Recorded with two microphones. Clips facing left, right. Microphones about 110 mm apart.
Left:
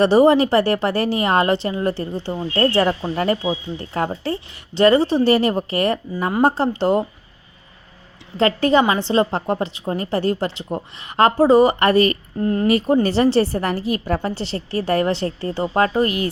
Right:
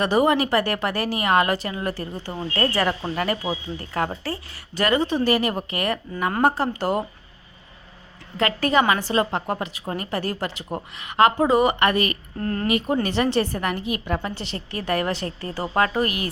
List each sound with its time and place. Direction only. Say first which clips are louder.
0.0 s a woman's voice: left 6 dB; 30° left (ahead or behind)
8.4 s a woman's voice: left 5 dB; 30° left (ahead or behind)
12.4 s a woman's voice: left 6 dB; 20° left (ahead or behind)
12.6 s a woman's voice: left 6 dB; 35° left (ahead or behind)